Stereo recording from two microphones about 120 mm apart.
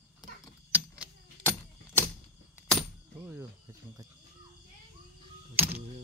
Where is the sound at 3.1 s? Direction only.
15° right (ahead or behind).